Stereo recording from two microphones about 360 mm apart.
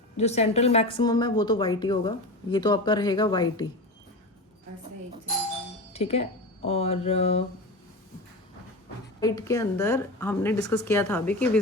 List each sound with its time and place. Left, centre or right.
0.2 s a woman's voice: centre
5.9 s a woman's voice: centre
9.2 s a woman's voice: centre